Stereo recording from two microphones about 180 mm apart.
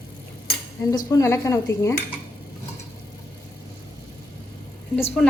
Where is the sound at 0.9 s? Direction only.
20° left (ahead or behind).